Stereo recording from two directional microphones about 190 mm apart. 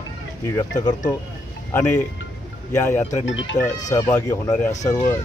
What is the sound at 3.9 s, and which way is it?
Speech, 15° left (ahead or behind).